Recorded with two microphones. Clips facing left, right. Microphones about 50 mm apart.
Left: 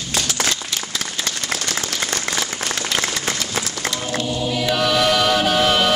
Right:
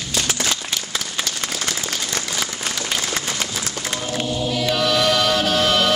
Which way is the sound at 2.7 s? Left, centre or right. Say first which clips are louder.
Left 3 dB; left.